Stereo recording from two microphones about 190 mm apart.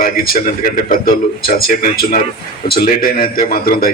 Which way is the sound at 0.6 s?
50° left (ahead or behind).